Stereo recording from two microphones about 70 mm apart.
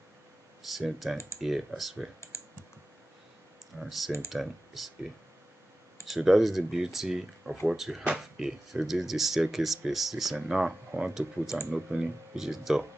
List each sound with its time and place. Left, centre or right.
0.7 s speech: centre
2.3 s computer keyboard: left
3.8 s speech: centre
6.0 s speech: centre